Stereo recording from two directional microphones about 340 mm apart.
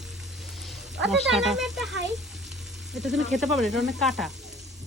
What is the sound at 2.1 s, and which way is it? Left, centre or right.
Frying, centre.